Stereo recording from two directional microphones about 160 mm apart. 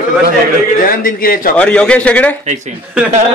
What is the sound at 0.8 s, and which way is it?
Speech, 65° left (ahead or behind).